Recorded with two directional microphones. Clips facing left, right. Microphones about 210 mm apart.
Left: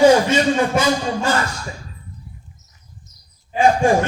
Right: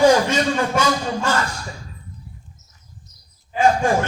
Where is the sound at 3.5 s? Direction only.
25° left (ahead or behind).